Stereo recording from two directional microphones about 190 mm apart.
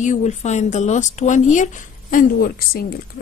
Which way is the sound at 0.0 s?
40° left (ahead or behind).